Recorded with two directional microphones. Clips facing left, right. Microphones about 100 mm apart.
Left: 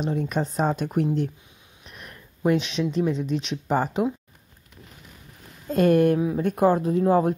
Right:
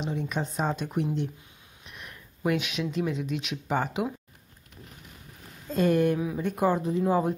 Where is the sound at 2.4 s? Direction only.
30° left (ahead or behind).